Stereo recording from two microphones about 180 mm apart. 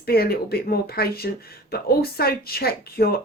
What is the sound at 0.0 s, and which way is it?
Speech, 60° left (ahead or behind).